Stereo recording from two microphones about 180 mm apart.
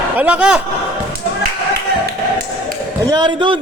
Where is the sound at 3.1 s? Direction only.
25° right (ahead or behind).